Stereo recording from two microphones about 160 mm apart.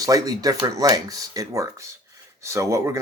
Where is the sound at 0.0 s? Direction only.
20° right (ahead or behind).